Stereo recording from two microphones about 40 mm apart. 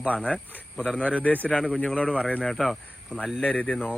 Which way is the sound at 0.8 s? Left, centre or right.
Left.